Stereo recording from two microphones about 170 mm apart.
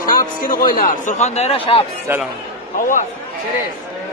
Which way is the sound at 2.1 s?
15° right (ahead or behind).